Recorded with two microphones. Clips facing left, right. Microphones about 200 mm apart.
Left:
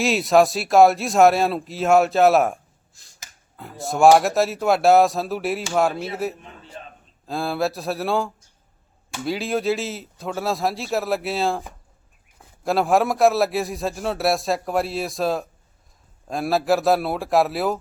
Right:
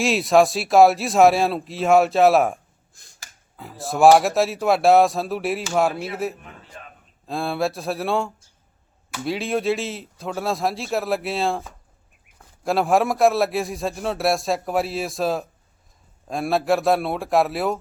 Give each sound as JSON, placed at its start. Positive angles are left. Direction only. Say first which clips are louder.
{"t": 0.0, "sound": "a man's voice", "louder": "even", "side_deg": 0}
{"t": 3.6, "sound": "a man's voice", "louder": "even", "side_deg": 0}
{"t": 6.4, "sound": "a sound", "louder": "left 2 dB", "side_deg": 25}
{"t": 7.3, "sound": "a man's voice", "louder": "even", "side_deg": 0}
{"t": 12.6, "sound": "a man's voice", "louder": "even", "side_deg": 0}